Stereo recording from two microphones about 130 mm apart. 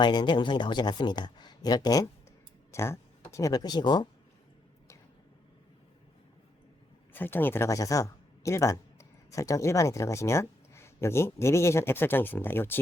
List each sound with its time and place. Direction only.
0.0 s speech: 35° left (ahead or behind)
7.1 s speech: 15° left (ahead or behind)